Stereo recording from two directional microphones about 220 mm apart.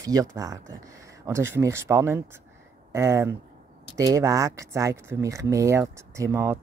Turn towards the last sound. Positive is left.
turn(degrees=-10)  # may be behind; listen again after turning